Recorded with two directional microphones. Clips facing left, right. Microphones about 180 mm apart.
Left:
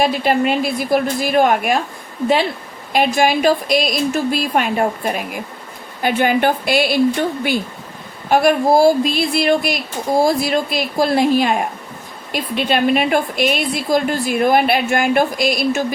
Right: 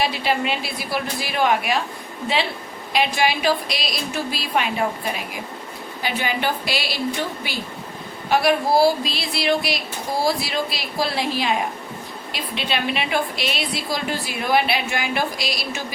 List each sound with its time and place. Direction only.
0.0 s a woman's voice: 50° left (ahead or behind)
2.9 s a woman's voice: 45° left (ahead or behind)